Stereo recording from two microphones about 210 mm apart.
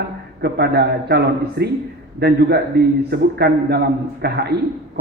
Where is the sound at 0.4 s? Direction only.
50° right (ahead or behind).